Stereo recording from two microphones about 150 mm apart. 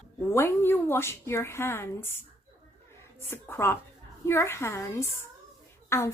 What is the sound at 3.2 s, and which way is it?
A woman's voice, 15° left (ahead or behind).